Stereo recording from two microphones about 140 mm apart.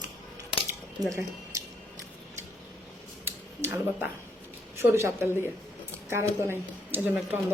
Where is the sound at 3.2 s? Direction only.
10° right (ahead or behind).